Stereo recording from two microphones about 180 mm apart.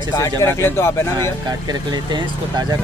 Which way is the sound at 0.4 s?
15° left (ahead or behind).